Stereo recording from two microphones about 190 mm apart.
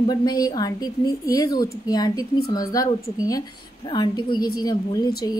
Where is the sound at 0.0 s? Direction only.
20° left (ahead or behind).